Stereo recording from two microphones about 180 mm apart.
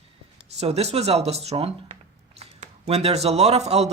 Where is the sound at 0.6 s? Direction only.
35° right (ahead or behind).